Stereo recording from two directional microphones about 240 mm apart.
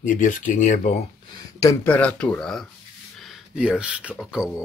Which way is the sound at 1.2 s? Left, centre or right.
Centre.